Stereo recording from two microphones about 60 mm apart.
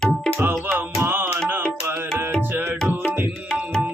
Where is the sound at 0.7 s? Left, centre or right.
Right.